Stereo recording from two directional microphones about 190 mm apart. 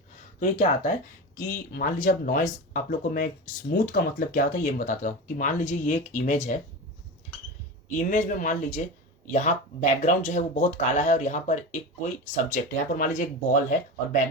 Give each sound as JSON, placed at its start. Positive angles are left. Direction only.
{"t": 0.3, "sound": "speech", "side_deg": 40}
{"t": 7.9, "sound": "speech", "side_deg": 40}